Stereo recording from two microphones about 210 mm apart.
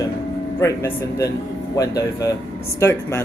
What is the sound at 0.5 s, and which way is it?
Speech, 15° left (ahead or behind).